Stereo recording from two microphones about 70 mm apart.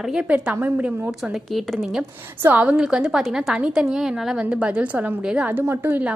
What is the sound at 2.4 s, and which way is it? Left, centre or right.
Speech, right.